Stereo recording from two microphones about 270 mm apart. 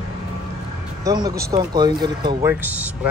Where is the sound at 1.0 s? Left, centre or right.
Centre.